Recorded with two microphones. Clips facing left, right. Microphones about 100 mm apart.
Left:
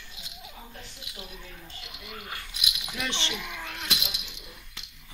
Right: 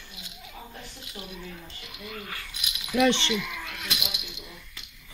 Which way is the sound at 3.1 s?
20° left (ahead or behind).